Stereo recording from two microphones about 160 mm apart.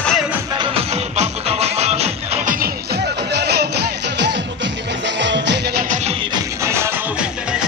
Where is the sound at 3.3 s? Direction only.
90° right.